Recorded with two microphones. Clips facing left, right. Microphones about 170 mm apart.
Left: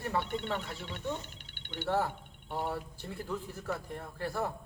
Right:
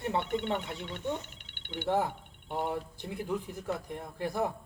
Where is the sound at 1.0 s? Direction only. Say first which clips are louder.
Right 2 dB; 35° left (ahead or behind).